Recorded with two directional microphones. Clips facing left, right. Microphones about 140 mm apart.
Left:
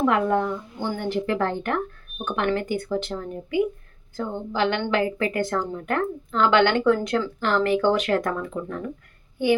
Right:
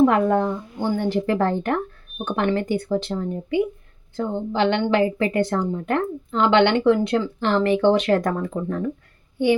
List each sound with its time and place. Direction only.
0.0 s a woman's voice: 35° right (ahead or behind)